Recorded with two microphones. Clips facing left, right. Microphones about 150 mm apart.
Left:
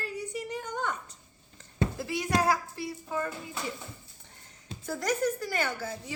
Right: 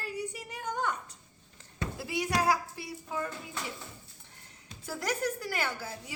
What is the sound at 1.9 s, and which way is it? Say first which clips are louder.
A woman's voice: even; 10° right (ahead or behind).